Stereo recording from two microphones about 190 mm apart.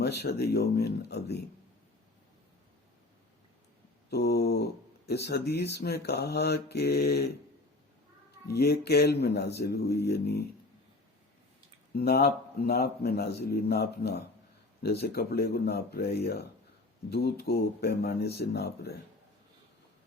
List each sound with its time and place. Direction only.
0.0 s speech: 55° left (ahead or behind)
4.1 s speech: 55° left (ahead or behind)
8.4 s speech: 55° left (ahead or behind)
11.9 s speech: 55° left (ahead or behind)